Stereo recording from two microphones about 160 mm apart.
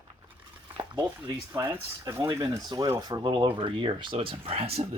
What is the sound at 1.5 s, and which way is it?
Speech, 15° right (ahead or behind).